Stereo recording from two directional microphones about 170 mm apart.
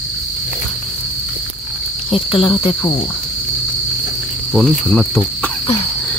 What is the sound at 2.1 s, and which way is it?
Speech, 30° left (ahead or behind).